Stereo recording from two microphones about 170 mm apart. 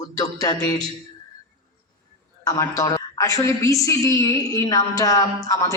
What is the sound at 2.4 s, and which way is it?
A woman's voice, 20° left (ahead or behind).